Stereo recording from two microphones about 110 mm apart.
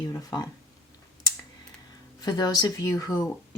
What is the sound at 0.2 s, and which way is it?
Speech, 35° left (ahead or behind).